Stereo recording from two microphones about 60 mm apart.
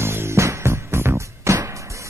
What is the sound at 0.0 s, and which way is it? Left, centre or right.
Music, right.